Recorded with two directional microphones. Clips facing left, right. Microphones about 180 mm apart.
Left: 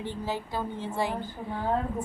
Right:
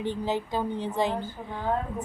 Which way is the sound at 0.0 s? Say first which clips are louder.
Right 4 dB; 20° right (ahead or behind).